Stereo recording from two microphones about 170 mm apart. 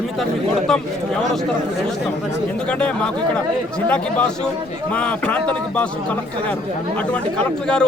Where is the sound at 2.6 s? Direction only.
5° left (ahead or behind).